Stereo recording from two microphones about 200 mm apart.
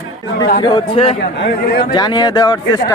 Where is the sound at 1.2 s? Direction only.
55° left (ahead or behind).